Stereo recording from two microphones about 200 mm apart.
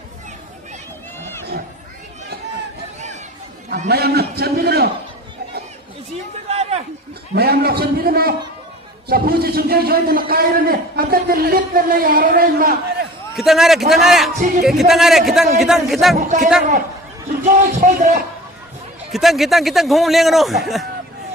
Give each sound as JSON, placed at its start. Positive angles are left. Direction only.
{"t": 3.8, "sound": "a man's voice", "side_deg": -50}
{"t": 6.5, "sound": "a sound", "side_deg": -30}
{"t": 7.3, "sound": "a man's voice", "side_deg": -50}
{"t": 13.3, "sound": "a man's voice", "side_deg": 0}
{"t": 14.3, "sound": "music", "side_deg": -40}
{"t": 14.6, "sound": "a man's voice", "side_deg": 0}
{"t": 17.4, "sound": "music", "side_deg": -35}
{"t": 19.1, "sound": "a man's voice", "side_deg": 0}